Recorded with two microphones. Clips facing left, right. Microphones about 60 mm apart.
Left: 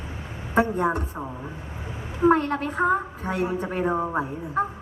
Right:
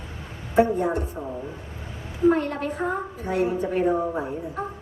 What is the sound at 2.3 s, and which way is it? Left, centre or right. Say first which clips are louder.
A woman's voice: left 1 dB; left.